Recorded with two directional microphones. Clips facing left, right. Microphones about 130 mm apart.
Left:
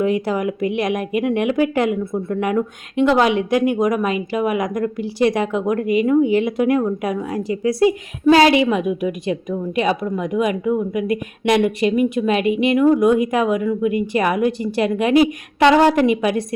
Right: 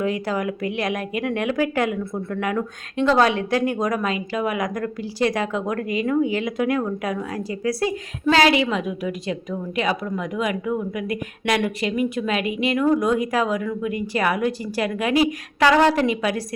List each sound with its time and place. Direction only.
0.0 s speech: 20° left (ahead or behind)